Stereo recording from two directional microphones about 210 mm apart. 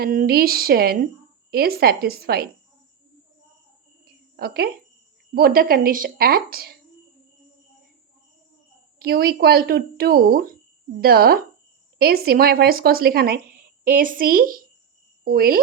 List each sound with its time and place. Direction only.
0.0 s speech: 45° right (ahead or behind)
4.0 s a sound: 50° right (ahead or behind)
5.3 s speech: 45° right (ahead or behind)
9.0 s speech: 45° right (ahead or behind)